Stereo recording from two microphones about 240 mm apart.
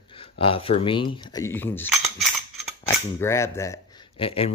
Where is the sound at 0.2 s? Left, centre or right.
Left.